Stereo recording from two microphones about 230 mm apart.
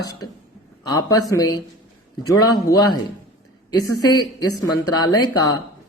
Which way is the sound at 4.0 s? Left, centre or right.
Centre.